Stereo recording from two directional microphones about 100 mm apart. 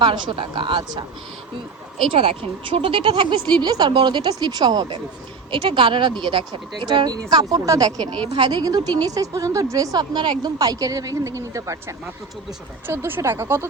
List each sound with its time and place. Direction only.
0.0 s speech: 55° right (ahead or behind)
2.1 s speech: 65° right (ahead or behind); by 4.9 s 45° right (ahead or behind)
5.5 s a woman's voice: 60° right (ahead or behind); by 13.7 s 25° right (ahead or behind)